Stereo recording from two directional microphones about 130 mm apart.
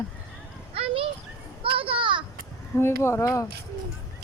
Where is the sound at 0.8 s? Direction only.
45° right (ahead or behind).